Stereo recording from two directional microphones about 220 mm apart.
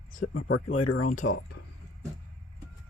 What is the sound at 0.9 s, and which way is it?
Speech, 90° left.